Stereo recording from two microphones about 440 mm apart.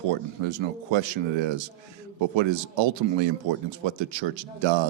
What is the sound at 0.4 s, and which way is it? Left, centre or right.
A man's voice, right.